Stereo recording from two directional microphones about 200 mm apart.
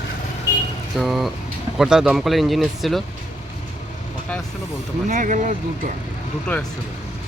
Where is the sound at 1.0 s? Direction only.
Centre (ahead or behind).